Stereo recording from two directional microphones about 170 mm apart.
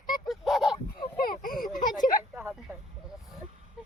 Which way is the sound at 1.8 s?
25° left (ahead or behind).